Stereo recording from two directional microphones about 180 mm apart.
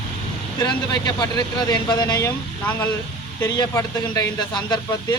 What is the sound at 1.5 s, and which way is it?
A man's voice, 20° left (ahead or behind).